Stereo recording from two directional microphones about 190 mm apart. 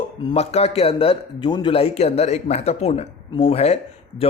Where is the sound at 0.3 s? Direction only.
30° left (ahead or behind).